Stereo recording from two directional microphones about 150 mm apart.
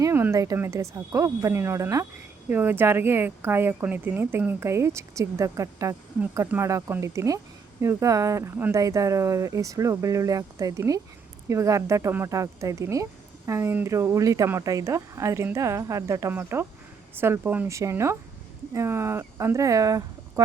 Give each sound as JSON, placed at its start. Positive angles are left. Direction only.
{"t": 0.0, "sound": "speech", "side_deg": -15}